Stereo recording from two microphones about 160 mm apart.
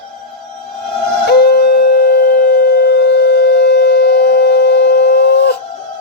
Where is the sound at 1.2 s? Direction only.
80° left.